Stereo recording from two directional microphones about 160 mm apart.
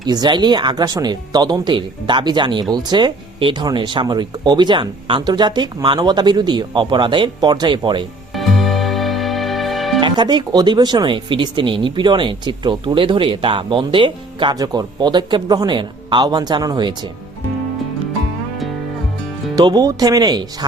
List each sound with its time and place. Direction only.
0.0 s speech: 25° right (ahead or behind)
8.4 s music: centre (ahead or behind)
10.0 s speech: 30° right (ahead or behind)
19.5 s speech: 25° right (ahead or behind)